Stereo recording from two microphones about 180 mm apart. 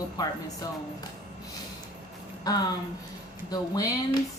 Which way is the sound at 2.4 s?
20° left (ahead or behind).